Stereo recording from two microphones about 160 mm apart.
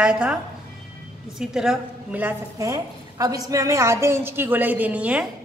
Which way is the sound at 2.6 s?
20° right (ahead or behind).